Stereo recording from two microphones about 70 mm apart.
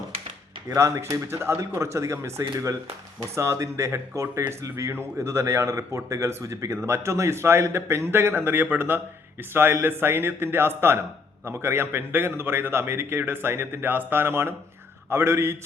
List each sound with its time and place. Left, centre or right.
0.7 s speech: right
1.3 s speech: right